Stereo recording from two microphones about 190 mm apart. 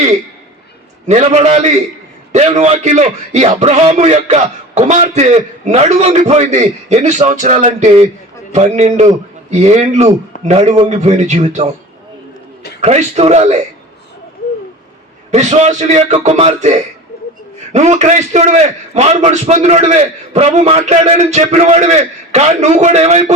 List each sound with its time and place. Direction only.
1.0 s a man's voice: 35° right (ahead or behind)
12.8 s a man's voice: 35° right (ahead or behind)
15.3 s a man's voice: 35° right (ahead or behind)